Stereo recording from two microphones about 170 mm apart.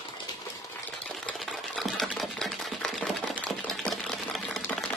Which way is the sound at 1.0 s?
5° left (ahead or behind).